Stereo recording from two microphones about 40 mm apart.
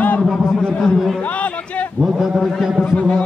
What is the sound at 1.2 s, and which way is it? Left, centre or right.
Speech, left.